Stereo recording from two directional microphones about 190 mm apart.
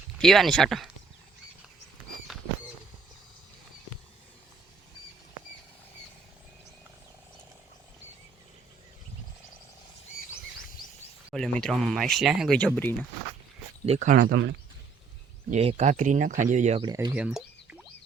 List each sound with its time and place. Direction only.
0.2 s speech: centre (ahead or behind)
11.3 s speech: 5° left (ahead or behind)
13.8 s speech: 35° right (ahead or behind)
14.3 s speech: 70° right (ahead or behind)
15.4 s speech: 35° right (ahead or behind)
16.8 s speech: 20° right (ahead or behind)
17.2 s a sound: 5° right (ahead or behind)